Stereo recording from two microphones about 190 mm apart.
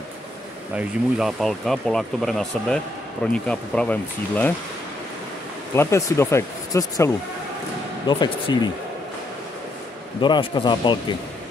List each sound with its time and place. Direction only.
0.7 s speech: 5° right (ahead or behind)
5.8 s speech: 15° left (ahead or behind)
8.1 s speech: 25° left (ahead or behind)
10.2 s speech: 25° left (ahead or behind)